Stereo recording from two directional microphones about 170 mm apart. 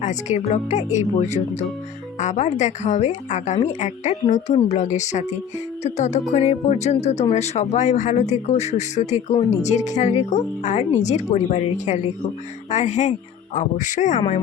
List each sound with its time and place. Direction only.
0.0 s speech: 45° left (ahead or behind)